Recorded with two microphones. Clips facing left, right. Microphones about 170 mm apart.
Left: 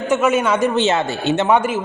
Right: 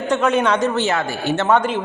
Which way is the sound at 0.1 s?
5° left (ahead or behind).